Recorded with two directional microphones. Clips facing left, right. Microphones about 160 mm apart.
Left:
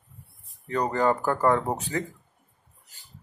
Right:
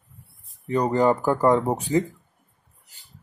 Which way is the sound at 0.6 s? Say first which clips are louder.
Right 4 dB; 15° right (ahead or behind).